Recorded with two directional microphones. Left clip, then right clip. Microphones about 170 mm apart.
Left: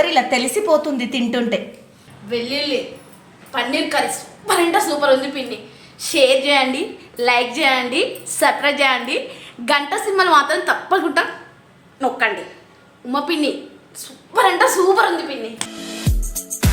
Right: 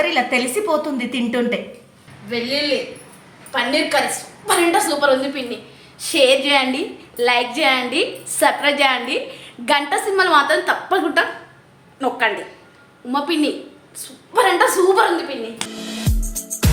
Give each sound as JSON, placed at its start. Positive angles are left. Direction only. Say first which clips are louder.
{"t": 0.0, "sound": "a woman's voice", "louder": "left 2 dB", "side_deg": 20}
{"t": 3.5, "sound": "a woman's voice", "louder": "right 2 dB", "side_deg": 5}
{"t": 15.8, "sound": "music", "louder": "even", "side_deg": 0}